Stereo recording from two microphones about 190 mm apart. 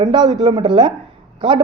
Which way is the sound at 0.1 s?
20° right (ahead or behind).